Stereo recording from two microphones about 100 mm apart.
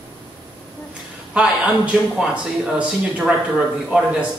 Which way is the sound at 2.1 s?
10° right (ahead or behind).